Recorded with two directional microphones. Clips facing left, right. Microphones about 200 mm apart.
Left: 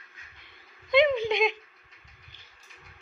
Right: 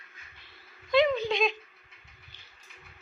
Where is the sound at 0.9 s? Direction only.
20° left (ahead or behind).